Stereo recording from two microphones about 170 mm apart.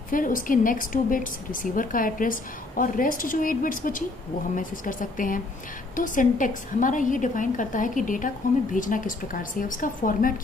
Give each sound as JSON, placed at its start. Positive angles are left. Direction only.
{"t": 0.1, "sound": "a woman's voice", "side_deg": 55}